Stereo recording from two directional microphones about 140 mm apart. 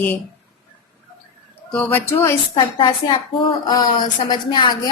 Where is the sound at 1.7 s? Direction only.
10° left (ahead or behind).